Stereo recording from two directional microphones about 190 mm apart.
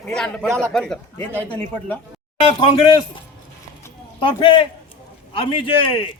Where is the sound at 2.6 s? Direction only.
25° left (ahead or behind).